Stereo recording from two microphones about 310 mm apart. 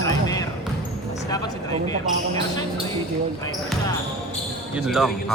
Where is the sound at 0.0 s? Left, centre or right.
Centre.